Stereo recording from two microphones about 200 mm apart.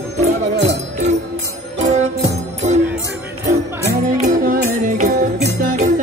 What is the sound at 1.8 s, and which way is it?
Music, 35° right (ahead or behind).